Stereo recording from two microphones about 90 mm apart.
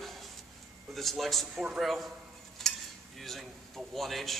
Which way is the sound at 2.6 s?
5° left (ahead or behind).